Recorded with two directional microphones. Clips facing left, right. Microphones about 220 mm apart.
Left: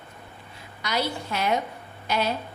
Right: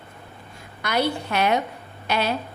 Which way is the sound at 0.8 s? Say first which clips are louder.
Right 4 dB; 55° right (ahead or behind).